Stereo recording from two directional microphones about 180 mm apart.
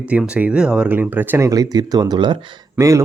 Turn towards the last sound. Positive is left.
turn(degrees=-15)  # may be behind; listen again after turning